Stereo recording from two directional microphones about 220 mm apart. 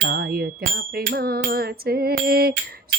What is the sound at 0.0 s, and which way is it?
Music, 45° right (ahead or behind).